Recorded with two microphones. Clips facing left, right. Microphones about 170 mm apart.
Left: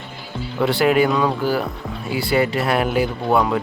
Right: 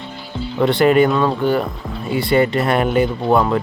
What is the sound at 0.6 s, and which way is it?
Speech, 5° left (ahead or behind).